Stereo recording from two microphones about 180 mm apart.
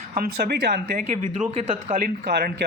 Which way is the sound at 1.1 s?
40° right (ahead or behind).